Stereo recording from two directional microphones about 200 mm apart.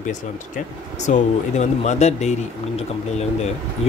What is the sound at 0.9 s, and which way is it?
Speech, 35° left (ahead or behind).